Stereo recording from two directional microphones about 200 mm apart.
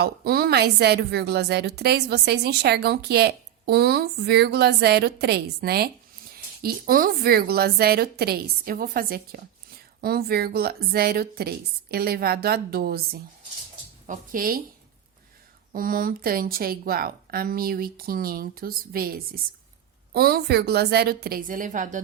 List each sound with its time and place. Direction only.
0.0 s a woman's voice: 50° right (ahead or behind)
15.7 s a woman's voice: 45° right (ahead or behind)